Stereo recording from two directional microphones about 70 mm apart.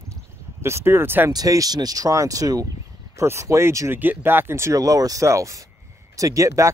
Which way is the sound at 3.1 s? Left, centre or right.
Right.